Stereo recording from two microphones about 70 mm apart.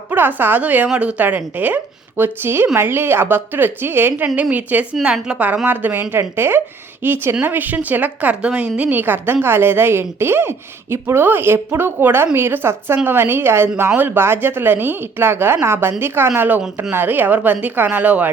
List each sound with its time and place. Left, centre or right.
0.1 s a woman's voice: right
4.4 s a woman's voice: right
5.6 s a woman's voice: right